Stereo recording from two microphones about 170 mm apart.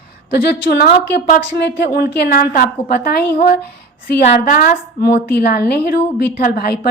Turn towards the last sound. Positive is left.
turn(degrees=65)  # may be behind; listen again after turning